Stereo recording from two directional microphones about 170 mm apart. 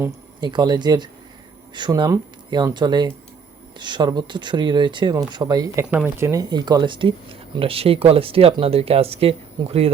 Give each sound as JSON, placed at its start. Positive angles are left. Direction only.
{"t": 0.3, "sound": "speech", "side_deg": -25}